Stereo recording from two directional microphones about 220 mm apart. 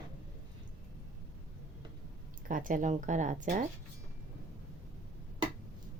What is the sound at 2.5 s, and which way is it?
Speech, 35° right (ahead or behind).